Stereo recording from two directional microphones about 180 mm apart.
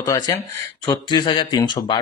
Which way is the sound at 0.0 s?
20° left (ahead or behind).